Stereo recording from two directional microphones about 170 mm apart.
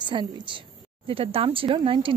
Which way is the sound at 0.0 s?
30° right (ahead or behind).